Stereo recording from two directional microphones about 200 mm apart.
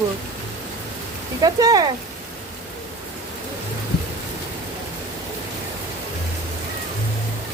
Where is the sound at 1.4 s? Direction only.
20° right (ahead or behind).